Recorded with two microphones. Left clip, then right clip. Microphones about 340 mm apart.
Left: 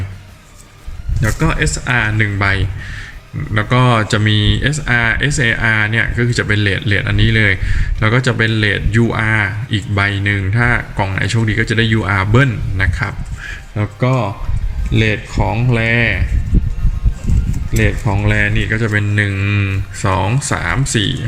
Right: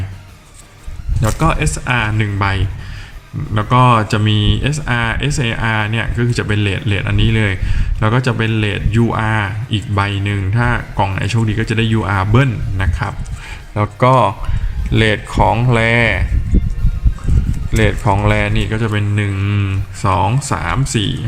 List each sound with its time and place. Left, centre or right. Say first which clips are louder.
1.2 s speech: right 1 dB; centre
15.5 s speech: right 2 dB; centre
17.8 s speech: right 5 dB; right
18.3 s speech: left 1 dB; centre